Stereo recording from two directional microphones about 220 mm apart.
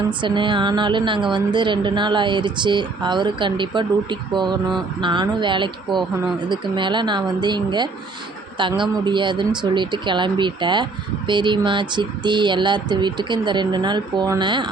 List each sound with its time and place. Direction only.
0.1 s a woman's voice: 20° right (ahead or behind)